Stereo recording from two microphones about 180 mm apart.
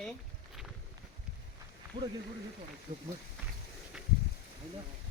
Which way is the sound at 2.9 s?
50° right (ahead or behind).